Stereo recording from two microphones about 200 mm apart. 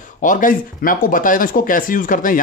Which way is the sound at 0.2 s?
40° left (ahead or behind).